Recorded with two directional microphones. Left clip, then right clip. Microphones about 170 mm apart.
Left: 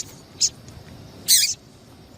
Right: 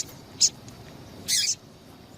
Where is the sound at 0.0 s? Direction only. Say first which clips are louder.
Even; centre (ahead or behind).